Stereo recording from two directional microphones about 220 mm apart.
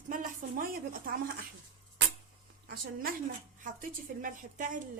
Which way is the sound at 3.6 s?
40° right (ahead or behind).